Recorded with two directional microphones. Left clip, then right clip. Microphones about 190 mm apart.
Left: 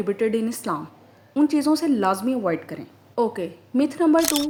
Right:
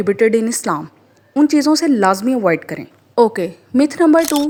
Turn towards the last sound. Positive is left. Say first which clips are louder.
# right 6 dB
turn(degrees=0)  # may be behind; listen again after turning